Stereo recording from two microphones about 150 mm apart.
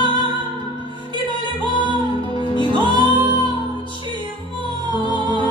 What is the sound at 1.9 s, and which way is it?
Music, 35° left (ahead or behind).